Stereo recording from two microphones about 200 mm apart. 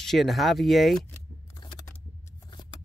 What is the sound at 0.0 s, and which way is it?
Speech, centre (ahead or behind).